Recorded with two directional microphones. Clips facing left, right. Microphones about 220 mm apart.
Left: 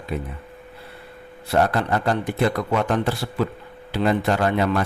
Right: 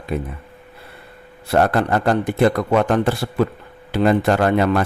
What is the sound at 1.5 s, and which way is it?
A man's voice, 50° right (ahead or behind).